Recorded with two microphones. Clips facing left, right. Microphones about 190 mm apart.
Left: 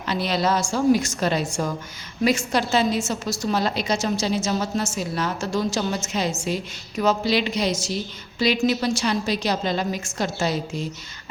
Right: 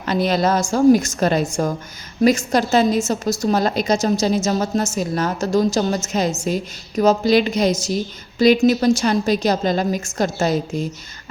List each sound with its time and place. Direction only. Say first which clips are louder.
0.1 s a woman's voice: right 5 dB; 45° right (ahead or behind)